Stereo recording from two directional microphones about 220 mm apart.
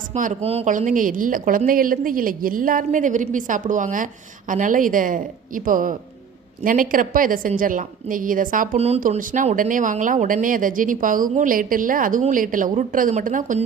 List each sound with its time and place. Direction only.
0.1 s a woman's voice: 35° right (ahead or behind)